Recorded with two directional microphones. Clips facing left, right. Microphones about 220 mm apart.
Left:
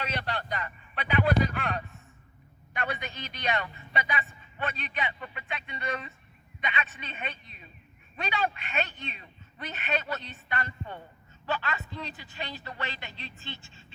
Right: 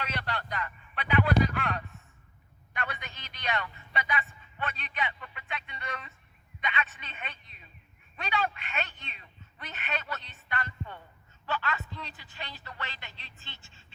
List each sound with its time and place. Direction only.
0.0 s a man's voice: 20° left (ahead or behind)